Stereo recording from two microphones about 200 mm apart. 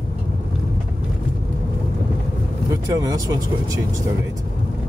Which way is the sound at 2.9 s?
20° right (ahead or behind).